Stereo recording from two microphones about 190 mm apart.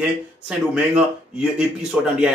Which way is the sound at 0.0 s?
5° right (ahead or behind).